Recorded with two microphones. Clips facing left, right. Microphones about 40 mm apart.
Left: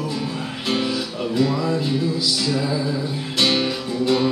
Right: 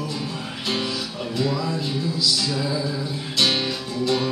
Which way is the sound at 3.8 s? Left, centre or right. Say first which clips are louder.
Left 4 dB; left.